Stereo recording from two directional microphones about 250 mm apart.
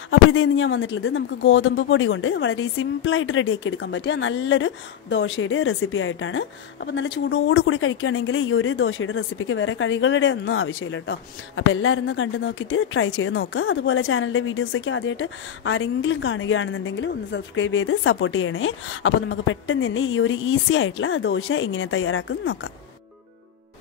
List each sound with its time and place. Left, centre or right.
0.1 s speech: left